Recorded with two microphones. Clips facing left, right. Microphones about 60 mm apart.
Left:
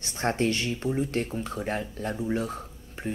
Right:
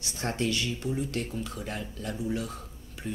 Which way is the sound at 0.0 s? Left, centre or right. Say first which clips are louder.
Left 4 dB; left.